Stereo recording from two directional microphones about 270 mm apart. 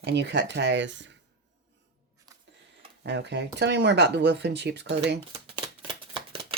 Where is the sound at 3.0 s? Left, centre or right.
Right.